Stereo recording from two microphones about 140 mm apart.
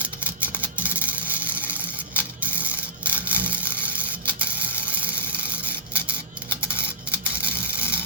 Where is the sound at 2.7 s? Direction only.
10° right (ahead or behind).